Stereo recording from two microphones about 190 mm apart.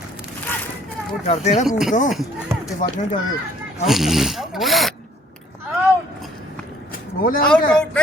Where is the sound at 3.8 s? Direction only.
Centre (ahead or behind).